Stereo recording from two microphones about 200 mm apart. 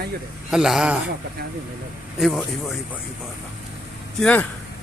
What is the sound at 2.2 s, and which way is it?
Speech, centre (ahead or behind).